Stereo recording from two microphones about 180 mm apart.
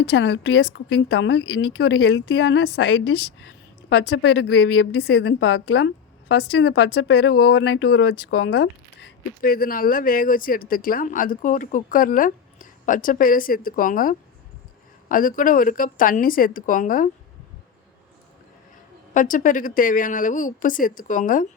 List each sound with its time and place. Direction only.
0.0 s a woman's voice: 75° left (ahead or behind); by 17.1 s 50° left (ahead or behind)
19.1 s speech: 45° left (ahead or behind)